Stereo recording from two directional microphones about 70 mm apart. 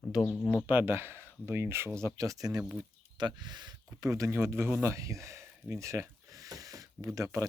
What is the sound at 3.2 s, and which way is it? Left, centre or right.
Speech, right.